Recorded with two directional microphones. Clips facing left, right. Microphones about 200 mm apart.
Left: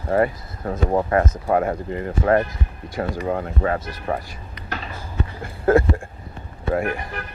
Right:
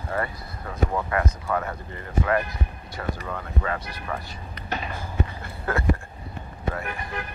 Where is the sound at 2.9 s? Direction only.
45° left (ahead or behind).